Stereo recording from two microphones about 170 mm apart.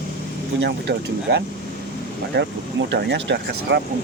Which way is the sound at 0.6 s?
80° right.